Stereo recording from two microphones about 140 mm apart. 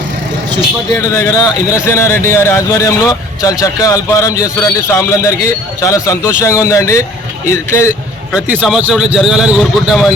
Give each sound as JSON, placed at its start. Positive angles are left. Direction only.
{"t": 0.9, "sound": "speech", "side_deg": 20}
{"t": 8.3, "sound": "a man's voice", "side_deg": -10}